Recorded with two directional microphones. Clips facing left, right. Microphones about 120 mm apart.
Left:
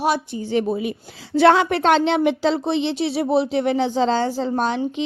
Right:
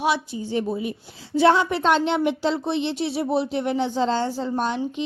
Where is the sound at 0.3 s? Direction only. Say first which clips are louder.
Left 4 dB; 80° left.